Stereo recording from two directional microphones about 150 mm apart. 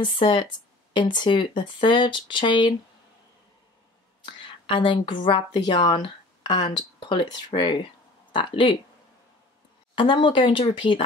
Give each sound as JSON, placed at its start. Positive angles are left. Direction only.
{"t": 0.0, "sound": "speech", "side_deg": 35}
{"t": 4.3, "sound": "a woman's voice", "side_deg": 30}
{"t": 9.9, "sound": "speech", "side_deg": 35}